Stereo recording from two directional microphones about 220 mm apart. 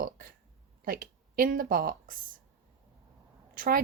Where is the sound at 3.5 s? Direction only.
40° right (ahead or behind).